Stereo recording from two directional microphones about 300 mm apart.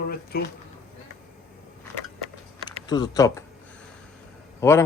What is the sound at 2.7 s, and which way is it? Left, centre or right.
Speech, centre.